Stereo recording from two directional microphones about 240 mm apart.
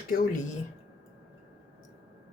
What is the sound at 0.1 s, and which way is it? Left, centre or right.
Speech, left.